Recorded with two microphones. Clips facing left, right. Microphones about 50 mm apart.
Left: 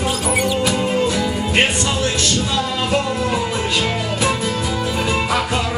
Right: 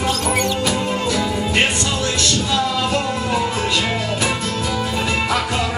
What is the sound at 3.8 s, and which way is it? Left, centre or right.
Music, centre.